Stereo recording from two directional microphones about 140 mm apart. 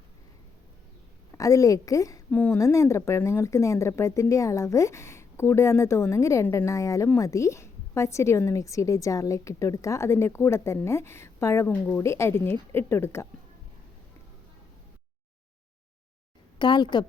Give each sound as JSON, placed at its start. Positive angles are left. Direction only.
{"t": 1.4, "sound": "speech", "side_deg": 25}
{"t": 2.3, "sound": "speech", "side_deg": 10}
{"t": 16.6, "sound": "a woman's voice", "side_deg": 35}